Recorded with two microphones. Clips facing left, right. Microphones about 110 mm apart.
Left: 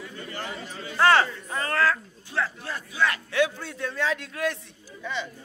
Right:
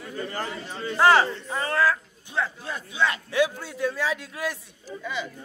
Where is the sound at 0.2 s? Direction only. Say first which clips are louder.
Right 6 dB; 40° right (ahead or behind).